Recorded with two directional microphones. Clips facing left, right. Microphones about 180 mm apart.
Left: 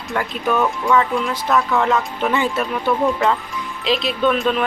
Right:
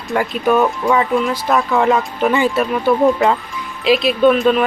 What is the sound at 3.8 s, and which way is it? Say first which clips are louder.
Speech: right 6 dB; 10° right (ahead or behind).